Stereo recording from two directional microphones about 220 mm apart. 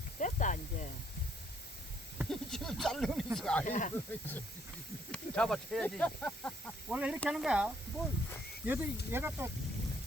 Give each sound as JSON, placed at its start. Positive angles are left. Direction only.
{"t": 0.2, "sound": "snake", "side_deg": 35}
{"t": 2.1, "sound": "a sound", "side_deg": 0}
{"t": 3.3, "sound": "speech", "side_deg": 5}
{"t": 3.7, "sound": "speech", "side_deg": 35}
{"t": 5.1, "sound": "speech", "side_deg": 5}